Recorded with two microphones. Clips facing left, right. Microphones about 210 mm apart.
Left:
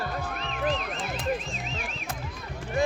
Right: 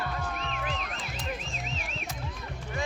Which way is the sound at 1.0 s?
55° left (ahead or behind).